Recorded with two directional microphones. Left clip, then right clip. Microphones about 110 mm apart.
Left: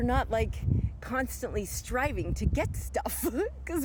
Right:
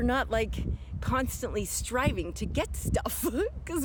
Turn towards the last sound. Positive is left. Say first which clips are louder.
# right 1 dB
turn(degrees=-15)  # may be behind; listen again after turning